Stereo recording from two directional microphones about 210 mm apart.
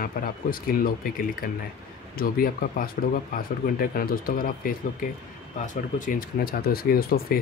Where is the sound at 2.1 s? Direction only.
45° left (ahead or behind).